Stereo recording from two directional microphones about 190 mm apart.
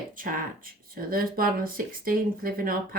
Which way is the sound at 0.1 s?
45° right (ahead or behind).